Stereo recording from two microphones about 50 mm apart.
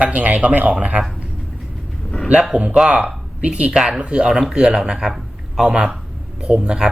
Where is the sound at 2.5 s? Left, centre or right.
Right.